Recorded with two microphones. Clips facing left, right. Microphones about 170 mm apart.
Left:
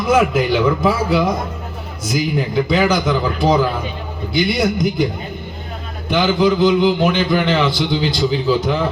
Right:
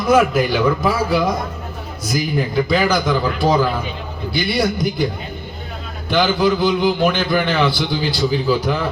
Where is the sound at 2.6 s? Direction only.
20° left (ahead or behind).